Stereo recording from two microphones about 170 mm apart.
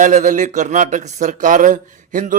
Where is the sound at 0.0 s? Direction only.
45° right (ahead or behind).